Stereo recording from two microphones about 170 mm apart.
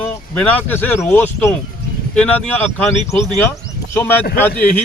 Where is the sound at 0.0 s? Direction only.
10° left (ahead or behind).